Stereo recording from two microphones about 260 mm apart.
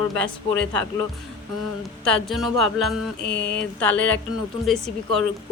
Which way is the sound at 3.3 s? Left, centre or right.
Left.